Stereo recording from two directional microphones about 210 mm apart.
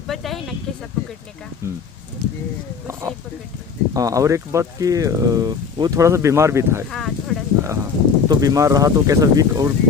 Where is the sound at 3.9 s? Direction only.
15° right (ahead or behind).